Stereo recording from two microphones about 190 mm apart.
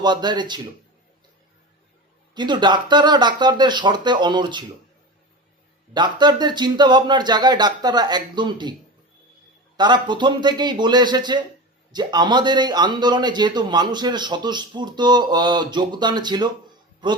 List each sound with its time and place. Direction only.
0.0 s a man's voice: 25° right (ahead or behind)
2.3 s a man's voice: 25° right (ahead or behind)
5.9 s a man's voice: 25° right (ahead or behind)
9.7 s a man's voice: 25° right (ahead or behind)